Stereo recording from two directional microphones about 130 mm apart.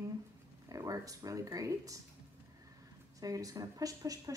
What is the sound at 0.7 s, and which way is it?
Speech, 25° right (ahead or behind).